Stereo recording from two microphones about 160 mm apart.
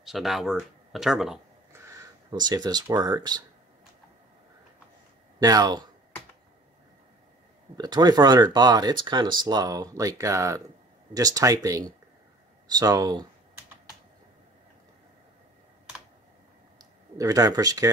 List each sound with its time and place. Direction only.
0.0 s speech: centre (ahead or behind)
2.3 s speech: 25° right (ahead or behind)
5.4 s speech: 25° right (ahead or behind)
7.7 s speech: 25° right (ahead or behind)
16.7 s a sound: 25° right (ahead or behind)